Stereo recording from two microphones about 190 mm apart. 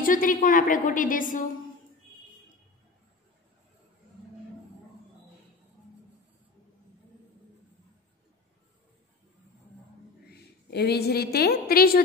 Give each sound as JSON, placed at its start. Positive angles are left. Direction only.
{"t": 0.0, "sound": "a woman's voice", "side_deg": 45}
{"t": 10.3, "sound": "a woman's voice", "side_deg": 60}